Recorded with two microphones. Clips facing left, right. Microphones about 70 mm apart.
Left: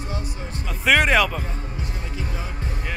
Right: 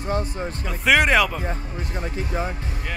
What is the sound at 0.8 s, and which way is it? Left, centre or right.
Speech, centre.